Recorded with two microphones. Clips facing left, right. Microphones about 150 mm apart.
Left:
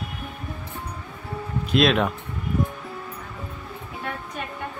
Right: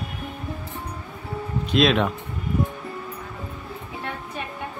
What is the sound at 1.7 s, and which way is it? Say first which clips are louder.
Speech: even; centre (ahead or behind).